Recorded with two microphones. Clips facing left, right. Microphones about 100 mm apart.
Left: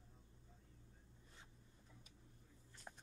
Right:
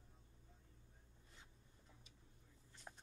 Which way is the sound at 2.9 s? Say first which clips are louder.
Left 1 dB; centre (ahead or behind).